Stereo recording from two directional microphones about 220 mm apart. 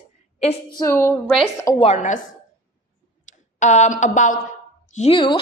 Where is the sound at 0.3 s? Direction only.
30° left (ahead or behind).